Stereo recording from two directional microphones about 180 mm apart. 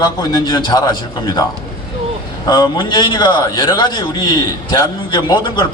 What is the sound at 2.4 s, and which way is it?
A man's voice, 25° left (ahead or behind).